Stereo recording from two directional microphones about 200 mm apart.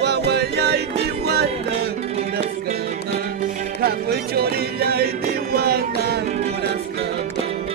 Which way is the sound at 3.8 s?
50° right (ahead or behind).